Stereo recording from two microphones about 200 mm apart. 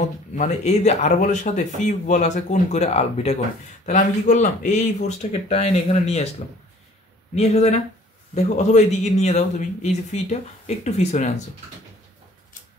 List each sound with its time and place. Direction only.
0.4 s speech: 35° left (ahead or behind)
7.3 s speech: 35° left (ahead or behind)